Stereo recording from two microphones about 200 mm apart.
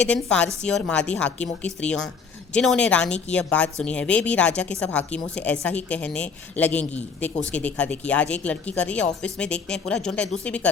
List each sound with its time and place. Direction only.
0.1 s speech: 5° left (ahead or behind)